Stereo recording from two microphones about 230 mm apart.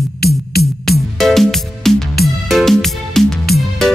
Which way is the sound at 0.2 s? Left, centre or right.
Left.